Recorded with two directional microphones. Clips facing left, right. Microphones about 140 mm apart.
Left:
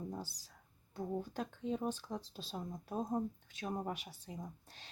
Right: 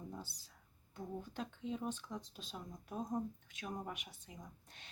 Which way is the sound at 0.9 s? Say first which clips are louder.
Left 5 dB; 35° left (ahead or behind).